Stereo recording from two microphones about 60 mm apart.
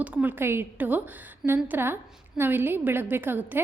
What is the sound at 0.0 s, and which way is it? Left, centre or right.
A woman's voice, right.